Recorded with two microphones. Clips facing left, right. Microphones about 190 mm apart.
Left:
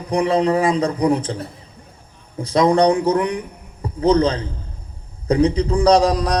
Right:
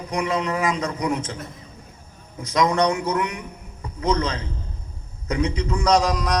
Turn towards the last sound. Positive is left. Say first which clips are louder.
# left 5 dB
turn(degrees=35)  # may be behind; listen again after turning